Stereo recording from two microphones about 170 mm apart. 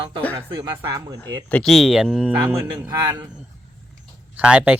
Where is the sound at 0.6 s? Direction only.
25° right (ahead or behind).